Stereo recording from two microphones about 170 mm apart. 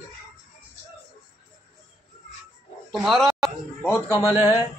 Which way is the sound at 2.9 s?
Centre (ahead or behind).